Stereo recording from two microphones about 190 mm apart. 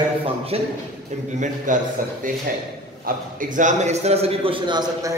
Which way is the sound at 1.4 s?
40° right (ahead or behind).